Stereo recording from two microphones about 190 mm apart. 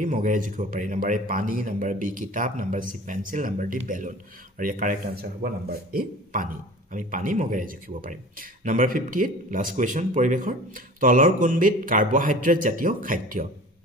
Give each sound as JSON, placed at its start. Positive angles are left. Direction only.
{"t": 0.0, "sound": "speech", "side_deg": -45}